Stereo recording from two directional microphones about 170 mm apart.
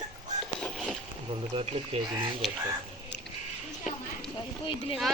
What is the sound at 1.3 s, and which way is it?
Speech, 30° right (ahead or behind).